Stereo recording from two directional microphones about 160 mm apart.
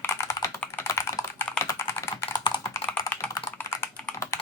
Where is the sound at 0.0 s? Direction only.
15° left (ahead or behind).